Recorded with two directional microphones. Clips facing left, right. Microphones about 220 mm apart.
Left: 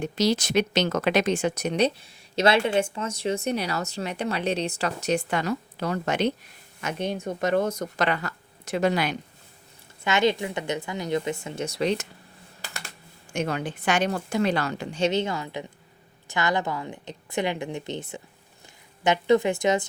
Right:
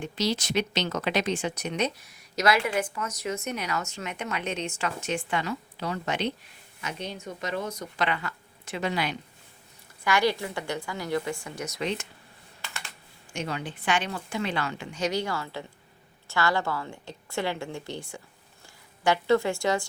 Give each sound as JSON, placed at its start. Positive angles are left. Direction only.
{"t": 0.0, "sound": "speech", "side_deg": 45}
{"t": 10.0, "sound": "a woman's voice", "side_deg": 20}
{"t": 12.6, "sound": "typing", "side_deg": 40}
{"t": 13.3, "sound": "a woman's voice", "side_deg": 50}